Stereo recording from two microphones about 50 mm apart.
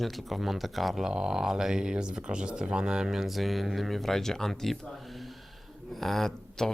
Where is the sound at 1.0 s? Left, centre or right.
Centre.